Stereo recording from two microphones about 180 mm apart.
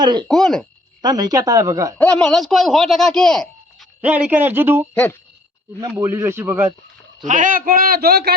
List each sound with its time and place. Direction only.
0.0 s speech: 25° right (ahead or behind)
0.3 s speech: 5° left (ahead or behind)
1.0 s speech: 20° right (ahead or behind)
2.0 s speech: 10° left (ahead or behind)
4.0 s speech: 10° right (ahead or behind)
6.0 s speech: 15° right (ahead or behind)
7.3 s a man's voice: 45° right (ahead or behind)